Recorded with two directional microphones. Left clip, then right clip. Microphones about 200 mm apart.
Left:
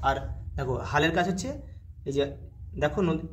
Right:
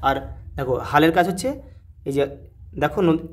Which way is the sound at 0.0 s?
40° right (ahead or behind).